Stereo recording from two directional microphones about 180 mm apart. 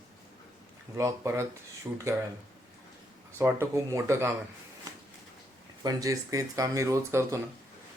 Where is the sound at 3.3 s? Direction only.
15° right (ahead or behind).